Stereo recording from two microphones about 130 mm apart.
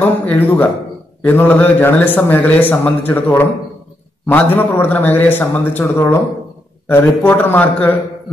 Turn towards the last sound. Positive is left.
turn(degrees=15)  # may be behind; listen again after turning